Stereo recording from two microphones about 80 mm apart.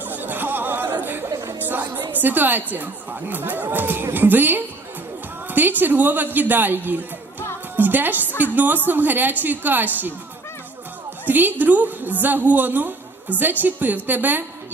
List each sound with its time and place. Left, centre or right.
0.0 s music: right
1.3 s music: right
1.5 s music: right
2.1 s speech: right
7.8 s music: right
8.4 s speech: right
11.3 s speech: right